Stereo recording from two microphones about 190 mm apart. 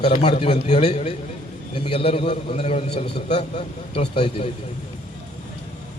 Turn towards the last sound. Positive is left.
turn(degrees=30)  # may be behind; listen again after turning